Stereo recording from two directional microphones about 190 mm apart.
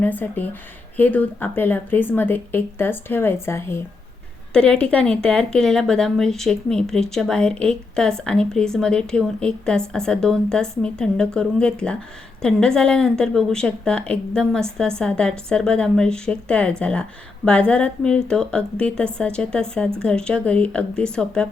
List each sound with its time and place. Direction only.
0.0 s a woman's voice: 10° left (ahead or behind)